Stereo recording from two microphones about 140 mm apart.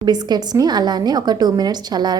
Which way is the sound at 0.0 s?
30° right (ahead or behind).